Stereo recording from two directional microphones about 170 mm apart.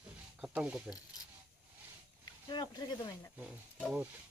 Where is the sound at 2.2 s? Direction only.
25° left (ahead or behind).